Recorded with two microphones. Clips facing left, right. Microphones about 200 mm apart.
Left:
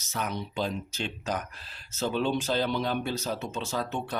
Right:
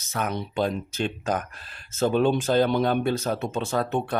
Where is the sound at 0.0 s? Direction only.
55° right (ahead or behind).